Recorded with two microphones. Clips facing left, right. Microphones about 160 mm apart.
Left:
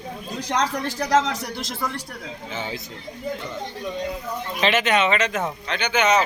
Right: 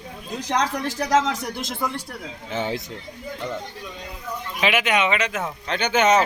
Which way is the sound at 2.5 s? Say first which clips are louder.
Right 6 dB; 65° right (ahead or behind).